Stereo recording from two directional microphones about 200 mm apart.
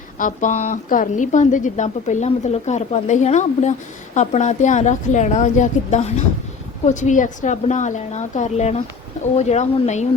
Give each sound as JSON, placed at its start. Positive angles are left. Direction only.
{"t": 0.2, "sound": "a woman's voice", "side_deg": 40}